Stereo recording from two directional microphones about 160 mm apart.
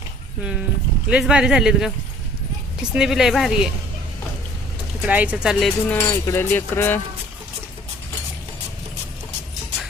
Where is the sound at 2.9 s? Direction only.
5° right (ahead or behind).